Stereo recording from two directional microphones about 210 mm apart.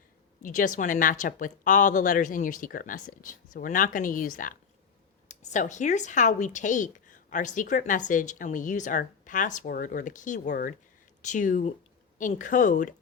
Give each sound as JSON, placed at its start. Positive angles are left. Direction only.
{"t": 0.4, "sound": "speech", "side_deg": 40}